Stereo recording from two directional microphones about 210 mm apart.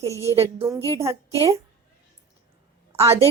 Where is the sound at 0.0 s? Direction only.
15° right (ahead or behind).